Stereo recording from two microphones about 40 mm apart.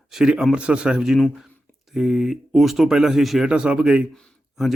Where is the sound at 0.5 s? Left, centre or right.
Right.